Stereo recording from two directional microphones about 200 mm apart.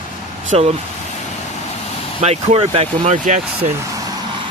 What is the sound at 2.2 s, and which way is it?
Speech, 30° right (ahead or behind).